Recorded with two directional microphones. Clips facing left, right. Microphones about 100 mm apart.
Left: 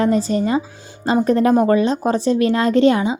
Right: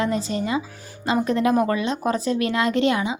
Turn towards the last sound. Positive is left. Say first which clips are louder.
# left 6 dB
turn(degrees=35)  # may be behind; listen again after turning